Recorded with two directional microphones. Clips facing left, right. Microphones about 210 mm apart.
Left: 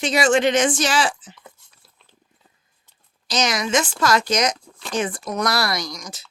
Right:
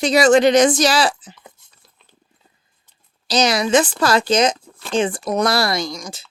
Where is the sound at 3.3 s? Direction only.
35° right (ahead or behind).